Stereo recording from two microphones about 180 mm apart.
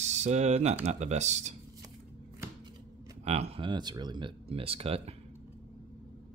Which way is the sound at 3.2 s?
35° right (ahead or behind).